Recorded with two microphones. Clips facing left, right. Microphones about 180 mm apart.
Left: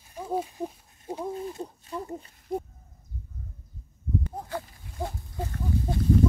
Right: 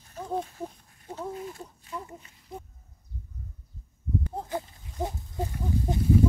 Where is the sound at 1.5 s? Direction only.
30° left (ahead or behind).